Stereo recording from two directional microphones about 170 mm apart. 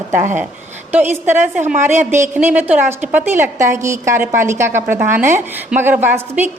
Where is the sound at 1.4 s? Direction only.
45° right (ahead or behind).